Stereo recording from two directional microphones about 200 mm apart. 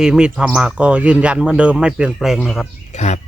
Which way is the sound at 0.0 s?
5° right (ahead or behind).